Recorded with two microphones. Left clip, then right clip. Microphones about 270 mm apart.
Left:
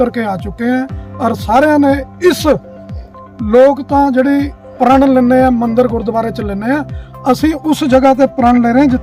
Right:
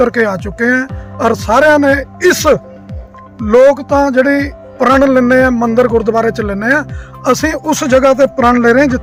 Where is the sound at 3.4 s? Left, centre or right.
Centre.